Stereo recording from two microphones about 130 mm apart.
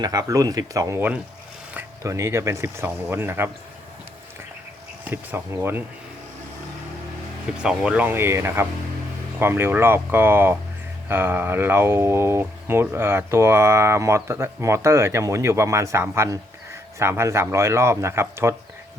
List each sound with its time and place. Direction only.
0.0 s speech: 30° right (ahead or behind)
5.0 s speech: 15° right (ahead or behind)
7.6 s speech: 5° right (ahead or behind)